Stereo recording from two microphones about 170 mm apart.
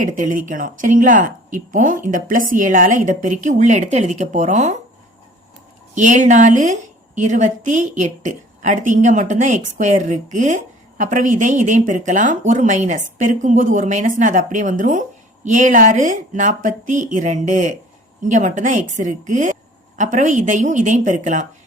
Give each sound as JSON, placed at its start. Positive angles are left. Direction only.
{"t": 0.0, "sound": "a woman's voice", "side_deg": -50}
{"t": 5.9, "sound": "a woman's voice", "side_deg": -45}